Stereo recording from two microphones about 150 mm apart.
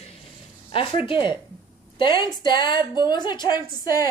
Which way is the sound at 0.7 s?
35° left (ahead or behind).